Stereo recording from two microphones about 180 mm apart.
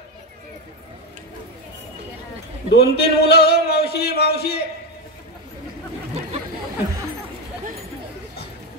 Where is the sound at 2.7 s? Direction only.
65° left (ahead or behind).